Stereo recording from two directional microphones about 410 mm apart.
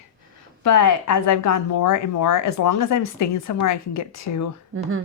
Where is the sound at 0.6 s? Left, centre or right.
Left.